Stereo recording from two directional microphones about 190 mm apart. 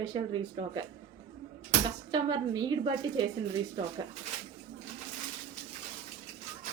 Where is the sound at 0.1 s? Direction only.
25° right (ahead or behind).